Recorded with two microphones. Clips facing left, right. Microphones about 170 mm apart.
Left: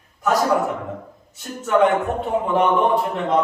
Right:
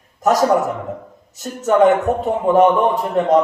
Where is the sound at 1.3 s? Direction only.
40° right (ahead or behind).